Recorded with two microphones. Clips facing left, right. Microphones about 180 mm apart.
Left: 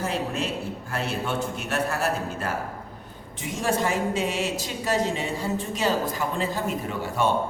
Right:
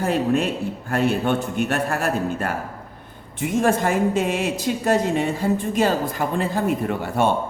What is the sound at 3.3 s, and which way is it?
Speech, 55° right (ahead or behind).